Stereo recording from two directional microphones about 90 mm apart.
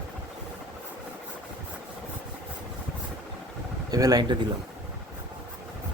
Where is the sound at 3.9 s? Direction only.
45° right (ahead or behind).